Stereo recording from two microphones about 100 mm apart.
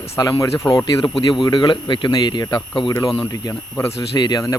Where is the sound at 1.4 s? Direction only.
50° left (ahead or behind).